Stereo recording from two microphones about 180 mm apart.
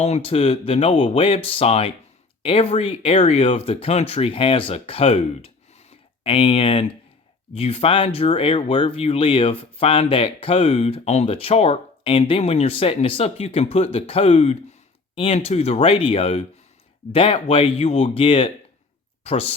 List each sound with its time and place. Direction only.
0.0 s speech: 35° left (ahead or behind)